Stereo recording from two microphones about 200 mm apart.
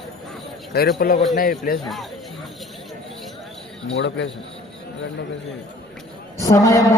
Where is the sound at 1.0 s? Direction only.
45° left (ahead or behind).